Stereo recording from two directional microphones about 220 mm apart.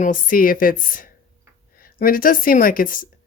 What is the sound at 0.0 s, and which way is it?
Speech, 40° left (ahead or behind).